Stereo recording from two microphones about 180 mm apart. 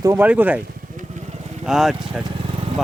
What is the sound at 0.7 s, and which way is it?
Vehicle, 50° right (ahead or behind).